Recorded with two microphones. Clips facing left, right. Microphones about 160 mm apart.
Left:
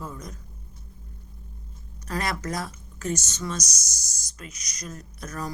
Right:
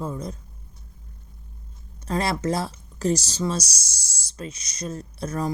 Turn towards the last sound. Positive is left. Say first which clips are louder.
# right 7 dB
turn(degrees=-30)  # may be behind; listen again after turning